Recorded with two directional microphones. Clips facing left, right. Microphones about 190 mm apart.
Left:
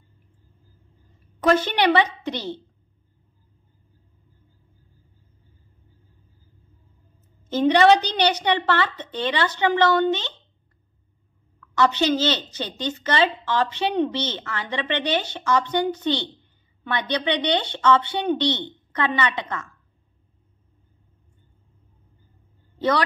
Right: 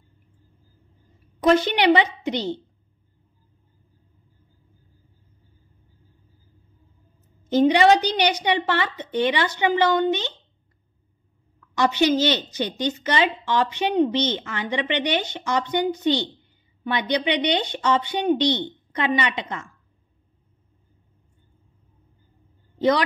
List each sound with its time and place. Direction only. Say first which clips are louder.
1.9 s a woman's voice: right 3 dB; 15° right (ahead or behind)
7.4 s a woman's voice: even; 15° right (ahead or behind)
11.7 s a woman's voice: right 1 dB; 15° right (ahead or behind)
22.8 s speech: right 2 dB; 15° right (ahead or behind)